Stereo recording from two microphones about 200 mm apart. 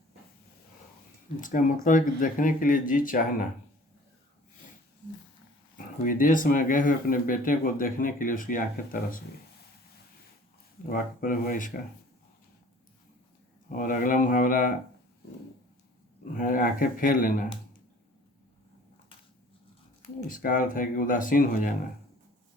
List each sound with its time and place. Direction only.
1.4 s speech: 40° left (ahead or behind)
5.7 s speech: 45° left (ahead or behind)
10.8 s speech: 45° left (ahead or behind)
13.7 s speech: 45° left (ahead or behind)
16.4 s speech: 45° left (ahead or behind)
20.2 s speech: 40° left (ahead or behind)